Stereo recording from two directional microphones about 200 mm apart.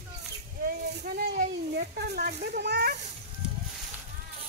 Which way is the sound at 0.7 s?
50° right (ahead or behind).